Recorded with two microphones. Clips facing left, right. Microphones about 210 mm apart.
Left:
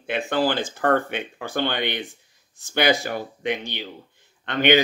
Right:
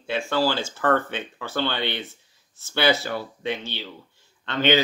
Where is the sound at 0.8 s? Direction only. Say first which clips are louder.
Left 1 dB; 45° left (ahead or behind).